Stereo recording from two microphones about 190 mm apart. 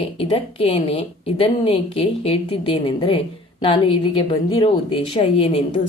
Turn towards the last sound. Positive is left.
turn(degrees=30)  # may be behind; listen again after turning